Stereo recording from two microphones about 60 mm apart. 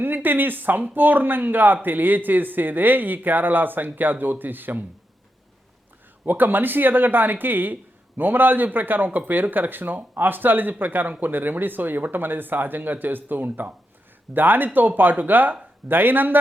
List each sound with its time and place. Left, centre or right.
0.0 s speech: right
6.2 s speech: right